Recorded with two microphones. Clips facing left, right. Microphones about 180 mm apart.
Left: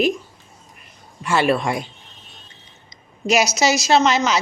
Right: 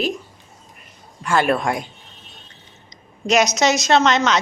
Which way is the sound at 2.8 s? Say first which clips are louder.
Even; 5° left (ahead or behind).